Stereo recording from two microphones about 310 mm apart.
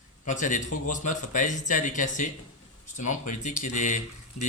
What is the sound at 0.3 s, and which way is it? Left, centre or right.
Speech, left.